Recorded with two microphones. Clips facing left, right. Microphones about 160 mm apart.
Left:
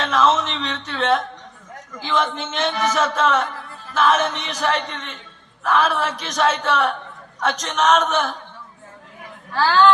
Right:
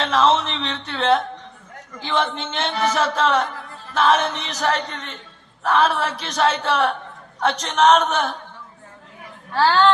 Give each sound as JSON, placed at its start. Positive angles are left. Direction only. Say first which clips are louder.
{"t": 0.0, "sound": "speech", "louder": "even", "side_deg": -30}
{"t": 2.4, "sound": "speech", "louder": "left 1 dB", "side_deg": -30}
{"t": 9.5, "sound": "speech", "louder": "left 1 dB", "side_deg": -30}